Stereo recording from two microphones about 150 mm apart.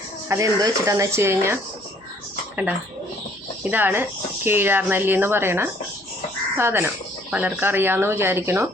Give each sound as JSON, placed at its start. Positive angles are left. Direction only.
{"t": 0.3, "sound": "speech", "side_deg": -20}
{"t": 3.6, "sound": "speech", "side_deg": -10}